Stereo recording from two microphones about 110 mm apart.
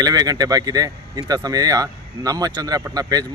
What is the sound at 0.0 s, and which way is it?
Speech, 35° right (ahead or behind).